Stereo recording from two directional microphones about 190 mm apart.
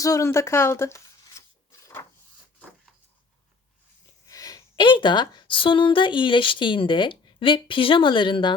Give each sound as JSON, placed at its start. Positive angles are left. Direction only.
{"t": 0.0, "sound": "speech", "side_deg": 15}
{"t": 4.3, "sound": "a woman's voice", "side_deg": 20}